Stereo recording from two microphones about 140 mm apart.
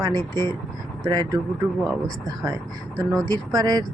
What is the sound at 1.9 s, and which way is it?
Speech, 5° left (ahead or behind).